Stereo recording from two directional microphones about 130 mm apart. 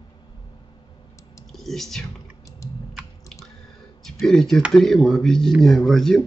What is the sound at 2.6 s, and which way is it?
Typing, 25° left (ahead or behind).